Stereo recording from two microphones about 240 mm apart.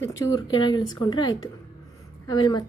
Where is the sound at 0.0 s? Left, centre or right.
Centre.